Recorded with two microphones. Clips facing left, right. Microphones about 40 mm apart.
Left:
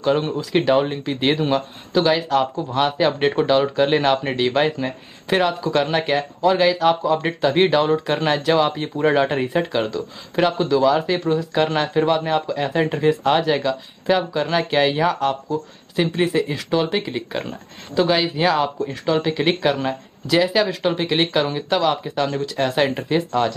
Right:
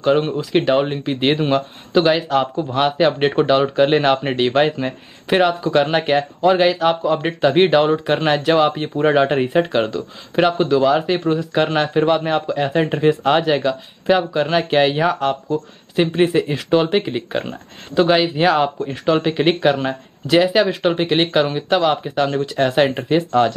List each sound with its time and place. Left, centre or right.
0.0 s speech: centre